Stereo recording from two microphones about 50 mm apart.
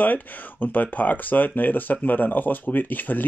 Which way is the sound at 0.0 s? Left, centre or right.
Left.